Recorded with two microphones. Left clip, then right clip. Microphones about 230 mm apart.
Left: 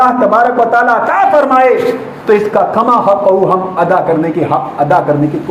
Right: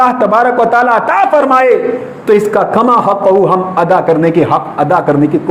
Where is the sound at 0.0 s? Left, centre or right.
Right.